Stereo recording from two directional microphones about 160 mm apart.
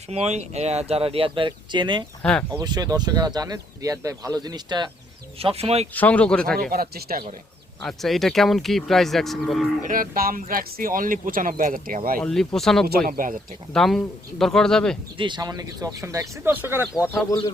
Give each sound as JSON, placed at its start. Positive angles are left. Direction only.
{"t": 0.1, "sound": "speech", "side_deg": -40}
{"t": 5.4, "sound": "speech", "side_deg": -35}
{"t": 5.9, "sound": "speech", "side_deg": 10}
{"t": 6.6, "sound": "speech", "side_deg": -70}
{"t": 7.8, "sound": "speech", "side_deg": 0}
{"t": 9.8, "sound": "speech", "side_deg": -60}
{"t": 12.2, "sound": "speech", "side_deg": 5}
{"t": 13.1, "sound": "speech", "side_deg": -60}
{"t": 13.7, "sound": "speech", "side_deg": 0}
{"t": 15.2, "sound": "speech", "side_deg": -25}